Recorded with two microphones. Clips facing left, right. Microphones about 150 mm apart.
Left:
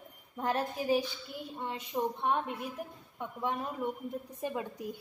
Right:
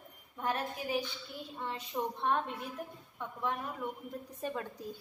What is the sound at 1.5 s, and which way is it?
A woman's voice, 20° left (ahead or behind).